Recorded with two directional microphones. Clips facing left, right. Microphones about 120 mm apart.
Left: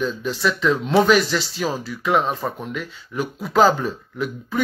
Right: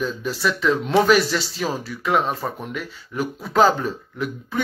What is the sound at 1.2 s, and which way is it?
Speech, 35° right (ahead or behind).